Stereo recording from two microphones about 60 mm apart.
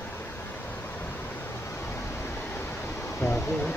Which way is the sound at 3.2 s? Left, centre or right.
Left.